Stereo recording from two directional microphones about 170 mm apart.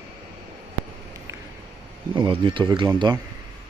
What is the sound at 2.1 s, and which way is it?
Speech, 30° right (ahead or behind).